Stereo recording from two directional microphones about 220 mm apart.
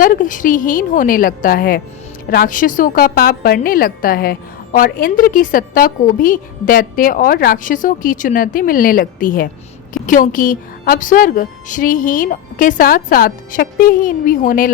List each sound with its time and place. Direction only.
0.0 s a woman's voice: 40° left (ahead or behind)